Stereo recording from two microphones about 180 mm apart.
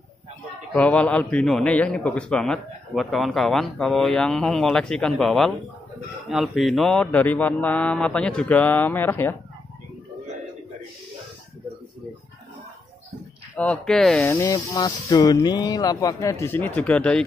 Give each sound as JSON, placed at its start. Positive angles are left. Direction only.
{"t": 0.7, "sound": "a man's voice", "side_deg": 5}
{"t": 13.6, "sound": "a man's voice", "side_deg": 5}
{"t": 14.2, "sound": "speech", "side_deg": 15}